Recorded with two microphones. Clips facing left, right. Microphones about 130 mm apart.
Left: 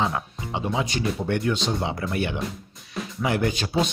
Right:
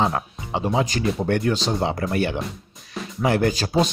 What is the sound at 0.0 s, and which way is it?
Speech, 45° right (ahead or behind).